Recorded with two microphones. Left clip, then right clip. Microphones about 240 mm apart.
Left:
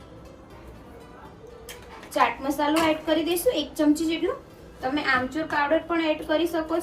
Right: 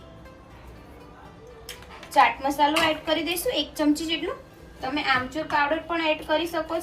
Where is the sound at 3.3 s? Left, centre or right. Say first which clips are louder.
Left 2 dB; centre.